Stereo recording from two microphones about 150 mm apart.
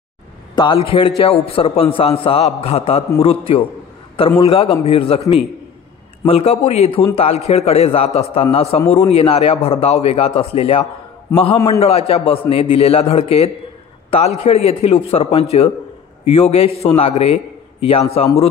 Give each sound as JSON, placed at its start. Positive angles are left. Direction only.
{"t": 0.8, "sound": "a man's voice", "side_deg": 35}
{"t": 6.2, "sound": "a man's voice", "side_deg": 40}